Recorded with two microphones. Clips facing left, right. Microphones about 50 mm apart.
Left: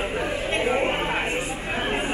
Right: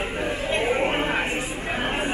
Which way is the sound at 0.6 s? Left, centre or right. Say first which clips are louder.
Even; centre.